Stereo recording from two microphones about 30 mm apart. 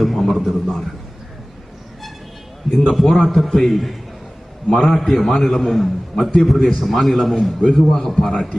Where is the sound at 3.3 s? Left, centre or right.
Centre.